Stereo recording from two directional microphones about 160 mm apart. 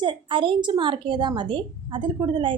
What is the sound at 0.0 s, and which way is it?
A woman's voice, 30° right (ahead or behind).